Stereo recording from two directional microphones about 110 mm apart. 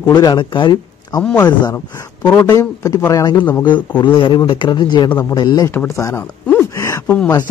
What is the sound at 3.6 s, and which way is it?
Speech, 45° left (ahead or behind).